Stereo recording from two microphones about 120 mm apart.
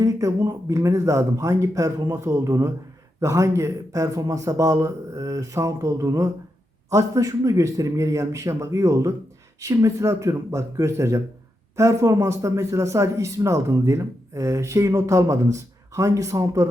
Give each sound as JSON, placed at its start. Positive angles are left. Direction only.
{"t": 0.0, "sound": "a man's voice", "side_deg": -25}